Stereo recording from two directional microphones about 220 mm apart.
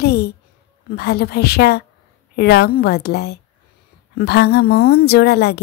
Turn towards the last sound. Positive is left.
turn(degrees=45)  # may be behind; listen again after turning